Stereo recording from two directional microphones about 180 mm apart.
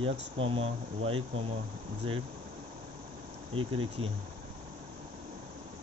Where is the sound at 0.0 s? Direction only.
30° right (ahead or behind).